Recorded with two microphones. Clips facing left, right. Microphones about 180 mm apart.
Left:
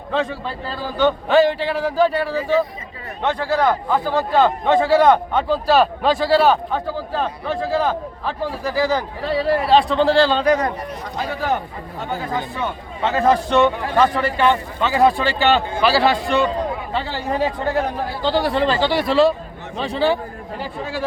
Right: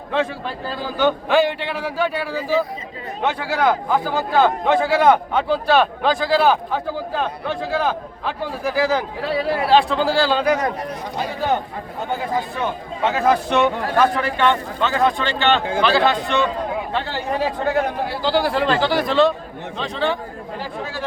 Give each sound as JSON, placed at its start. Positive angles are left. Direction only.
{"t": 0.9, "sound": "a man's voice", "side_deg": 0}
{"t": 13.1, "sound": "a man's voice", "side_deg": -5}
{"t": 18.2, "sound": "a man's voice", "side_deg": 0}